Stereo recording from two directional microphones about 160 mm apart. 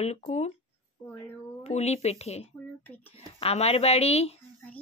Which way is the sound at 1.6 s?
45° left (ahead or behind).